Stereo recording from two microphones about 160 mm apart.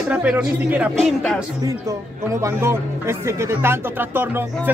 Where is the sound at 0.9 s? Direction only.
5° left (ahead or behind).